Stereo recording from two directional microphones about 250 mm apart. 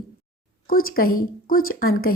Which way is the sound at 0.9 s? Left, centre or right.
Left.